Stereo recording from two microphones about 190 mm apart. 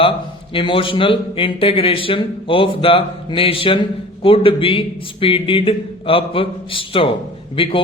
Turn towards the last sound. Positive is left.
turn(degrees=30)  # may be behind; listen again after turning